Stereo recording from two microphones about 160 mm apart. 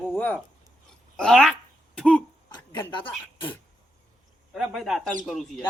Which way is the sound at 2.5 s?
30° left (ahead or behind).